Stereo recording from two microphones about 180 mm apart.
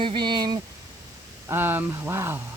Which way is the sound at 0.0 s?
25° right (ahead or behind).